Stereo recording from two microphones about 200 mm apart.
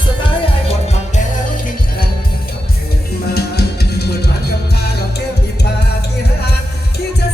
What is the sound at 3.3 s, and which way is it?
Music, 55° left (ahead or behind).